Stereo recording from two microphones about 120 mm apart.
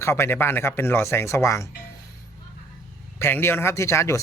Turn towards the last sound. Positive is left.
turn(degrees=25)  # may be behind; listen again after turning